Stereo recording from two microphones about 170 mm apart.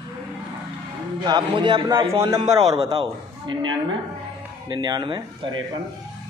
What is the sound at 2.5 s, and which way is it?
Speech, 35° right (ahead or behind).